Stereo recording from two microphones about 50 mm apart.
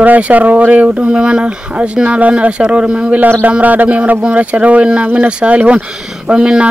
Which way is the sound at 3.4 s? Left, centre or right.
Right.